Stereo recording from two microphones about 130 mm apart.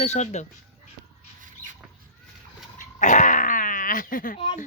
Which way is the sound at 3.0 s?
75° left (ahead or behind).